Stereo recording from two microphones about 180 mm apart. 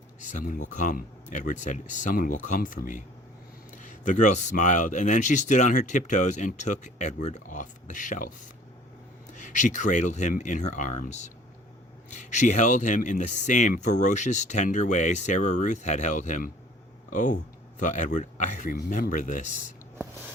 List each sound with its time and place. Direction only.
0.2 s speech: 45° left (ahead or behind)
9.3 s speech: 40° left (ahead or behind)